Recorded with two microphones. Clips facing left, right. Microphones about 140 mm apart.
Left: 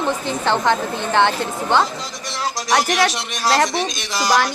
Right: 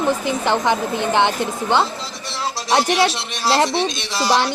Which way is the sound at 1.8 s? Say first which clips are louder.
Even; 30° right (ahead or behind).